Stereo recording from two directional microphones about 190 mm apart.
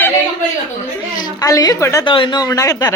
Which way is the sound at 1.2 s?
20° left (ahead or behind).